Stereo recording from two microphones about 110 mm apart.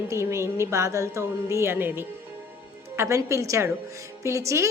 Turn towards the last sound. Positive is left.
turn(degrees=-25)  # may be behind; listen again after turning